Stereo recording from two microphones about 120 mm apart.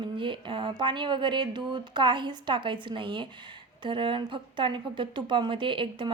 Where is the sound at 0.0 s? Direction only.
45° right (ahead or behind).